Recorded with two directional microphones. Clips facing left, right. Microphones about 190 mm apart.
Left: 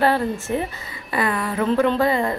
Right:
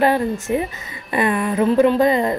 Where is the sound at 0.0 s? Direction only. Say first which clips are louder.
Right 2 dB; 15° right (ahead or behind).